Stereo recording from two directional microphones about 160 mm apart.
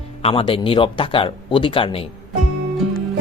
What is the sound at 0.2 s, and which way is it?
Speech, 35° left (ahead or behind).